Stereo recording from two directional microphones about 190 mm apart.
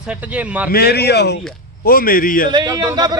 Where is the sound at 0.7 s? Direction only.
55° left (ahead or behind).